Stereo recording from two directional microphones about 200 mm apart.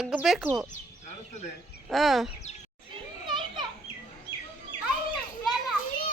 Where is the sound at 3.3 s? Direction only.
25° right (ahead or behind).